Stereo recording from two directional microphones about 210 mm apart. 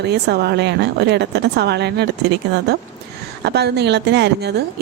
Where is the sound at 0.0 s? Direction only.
50° right (ahead or behind).